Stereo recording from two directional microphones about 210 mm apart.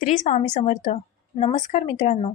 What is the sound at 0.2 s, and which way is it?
A woman's voice, 35° left (ahead or behind).